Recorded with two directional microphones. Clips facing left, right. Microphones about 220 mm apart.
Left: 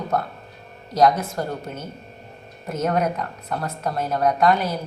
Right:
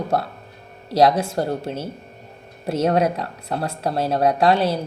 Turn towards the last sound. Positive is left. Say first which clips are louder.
# right 2 dB
turn(degrees=-30)  # may be behind; listen again after turning